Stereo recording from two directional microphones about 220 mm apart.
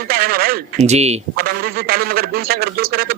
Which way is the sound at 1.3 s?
45° right (ahead or behind).